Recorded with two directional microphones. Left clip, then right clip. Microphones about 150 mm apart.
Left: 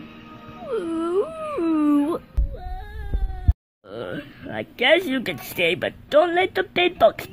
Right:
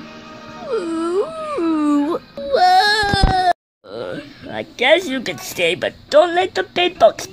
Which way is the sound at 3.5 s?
Centre (ahead or behind).